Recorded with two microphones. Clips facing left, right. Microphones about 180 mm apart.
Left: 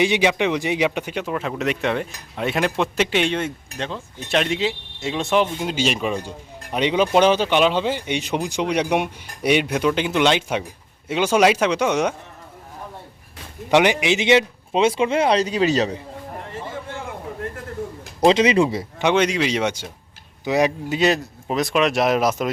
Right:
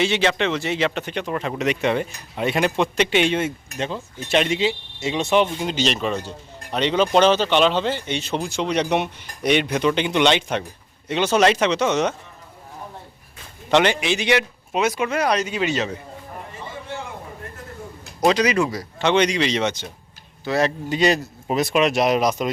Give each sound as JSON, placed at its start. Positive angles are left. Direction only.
{"t": 0.0, "sound": "speech", "side_deg": 15}
{"t": 13.7, "sound": "a man's voice", "side_deg": 15}
{"t": 18.3, "sound": "a man's voice", "side_deg": 25}
{"t": 19.0, "sound": "speech", "side_deg": 5}